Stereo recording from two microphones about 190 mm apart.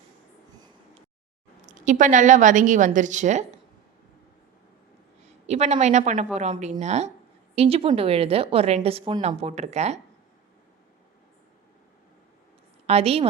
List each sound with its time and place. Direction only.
1.6 s a woman's voice: 40° right (ahead or behind)
5.5 s a woman's voice: 35° right (ahead or behind)
12.9 s a woman's voice: 30° right (ahead or behind)